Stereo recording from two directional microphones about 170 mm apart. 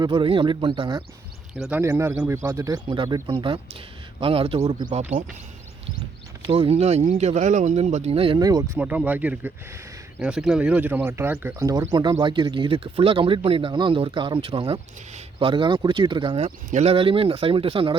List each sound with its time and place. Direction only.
0.0 s speech: 30° right (ahead or behind)
1.5 s speech: centre (ahead or behind)
1.8 s speech: 15° right (ahead or behind); by 4.7 s 35° right (ahead or behind)
6.4 s speech: 35° right (ahead or behind)
8.8 s speech: 10° right (ahead or behind)
12.2 s speech: 25° right (ahead or behind)